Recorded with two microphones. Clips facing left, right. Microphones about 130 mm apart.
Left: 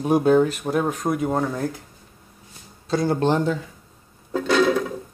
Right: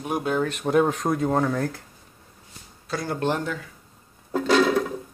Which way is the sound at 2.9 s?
25° left (ahead or behind).